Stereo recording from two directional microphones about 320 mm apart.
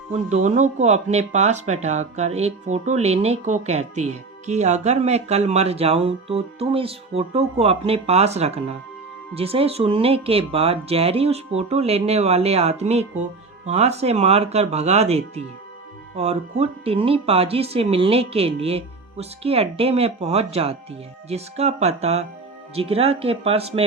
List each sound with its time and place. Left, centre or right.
0.1 s speech: right